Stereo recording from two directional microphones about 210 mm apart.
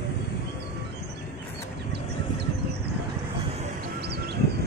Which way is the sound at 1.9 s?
50° right (ahead or behind).